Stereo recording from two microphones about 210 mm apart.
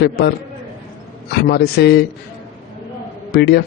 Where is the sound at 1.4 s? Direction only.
50° left (ahead or behind).